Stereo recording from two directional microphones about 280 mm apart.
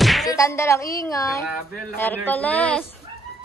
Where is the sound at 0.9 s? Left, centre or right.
Centre.